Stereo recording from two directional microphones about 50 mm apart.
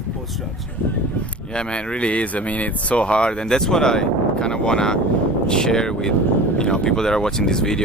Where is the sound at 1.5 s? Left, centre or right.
Centre.